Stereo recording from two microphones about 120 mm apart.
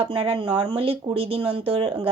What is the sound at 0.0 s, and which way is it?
Speech, 45° right (ahead or behind).